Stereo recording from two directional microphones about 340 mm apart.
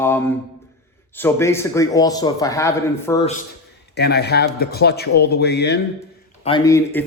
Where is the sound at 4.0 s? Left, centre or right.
Left.